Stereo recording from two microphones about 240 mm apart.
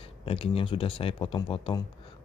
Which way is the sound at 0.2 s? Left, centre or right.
Left.